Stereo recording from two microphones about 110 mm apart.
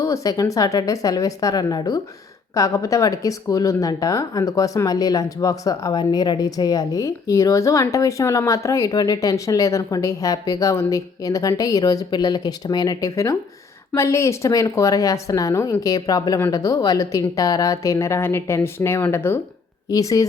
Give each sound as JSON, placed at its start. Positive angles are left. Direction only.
{"t": 0.0, "sound": "speech", "side_deg": 30}
{"t": 19.9, "sound": "speech", "side_deg": 30}